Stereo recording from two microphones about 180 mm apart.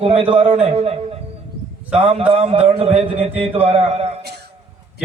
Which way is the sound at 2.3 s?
35° right (ahead or behind).